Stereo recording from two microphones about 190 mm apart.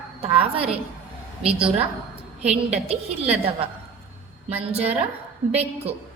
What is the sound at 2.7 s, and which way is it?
Speech, 35° right (ahead or behind).